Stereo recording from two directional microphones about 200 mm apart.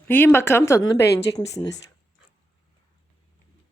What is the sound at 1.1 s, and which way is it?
Speech, 60° left (ahead or behind).